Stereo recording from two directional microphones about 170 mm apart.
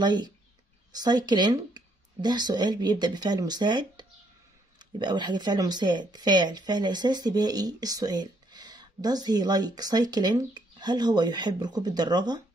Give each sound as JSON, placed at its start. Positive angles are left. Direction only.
{"t": 0.0, "sound": "speech", "side_deg": -25}